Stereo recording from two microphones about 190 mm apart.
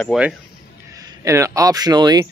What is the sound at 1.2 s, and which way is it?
Speech, 15° right (ahead or behind).